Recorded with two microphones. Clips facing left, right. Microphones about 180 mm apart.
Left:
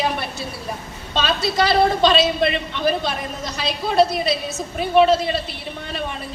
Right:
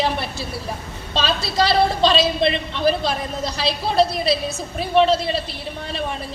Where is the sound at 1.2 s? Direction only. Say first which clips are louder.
Left 1 dB; 30° right (ahead or behind).